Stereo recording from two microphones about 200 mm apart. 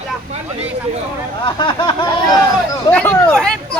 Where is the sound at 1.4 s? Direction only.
25° left (ahead or behind).